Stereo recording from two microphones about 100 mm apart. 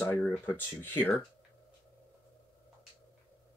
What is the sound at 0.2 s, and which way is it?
Speech, 20° left (ahead or behind).